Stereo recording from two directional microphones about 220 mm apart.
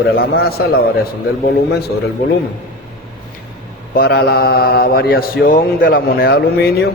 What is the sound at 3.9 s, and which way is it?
A man's voice, 45° left (ahead or behind).